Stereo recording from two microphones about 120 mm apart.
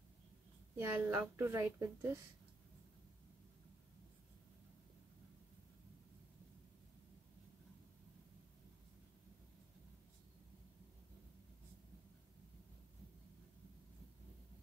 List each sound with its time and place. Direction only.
0.7 s speech: 15° right (ahead or behind)